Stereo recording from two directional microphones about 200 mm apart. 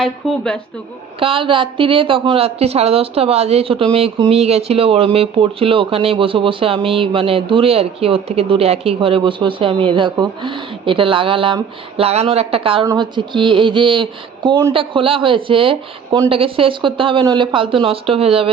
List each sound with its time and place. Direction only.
0.0 s speech: 5° left (ahead or behind)
1.2 s a woman's voice: 25° right (ahead or behind)